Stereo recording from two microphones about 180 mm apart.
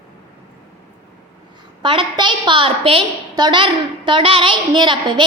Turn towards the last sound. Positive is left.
turn(degrees=-25)  # may be behind; listen again after turning